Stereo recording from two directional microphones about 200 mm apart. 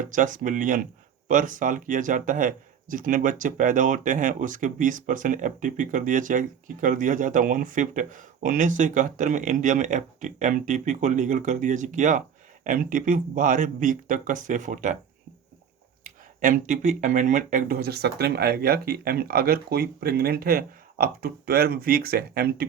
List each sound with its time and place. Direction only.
0.0 s speech: 40° right (ahead or behind)
16.0 s speech: 40° right (ahead or behind)